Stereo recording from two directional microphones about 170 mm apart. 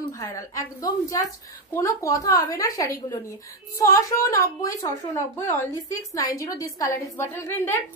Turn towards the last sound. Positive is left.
turn(degrees=15)  # may be behind; listen again after turning